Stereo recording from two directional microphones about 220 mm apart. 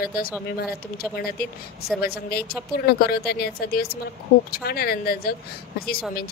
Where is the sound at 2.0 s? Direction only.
45° left (ahead or behind).